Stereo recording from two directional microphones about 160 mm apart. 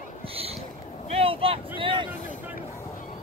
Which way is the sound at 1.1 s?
35° right (ahead or behind).